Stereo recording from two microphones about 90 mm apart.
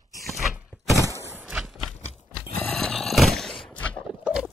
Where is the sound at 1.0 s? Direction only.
30° left (ahead or behind).